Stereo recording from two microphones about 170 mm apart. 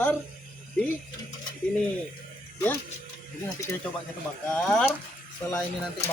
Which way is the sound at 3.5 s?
15° left (ahead or behind).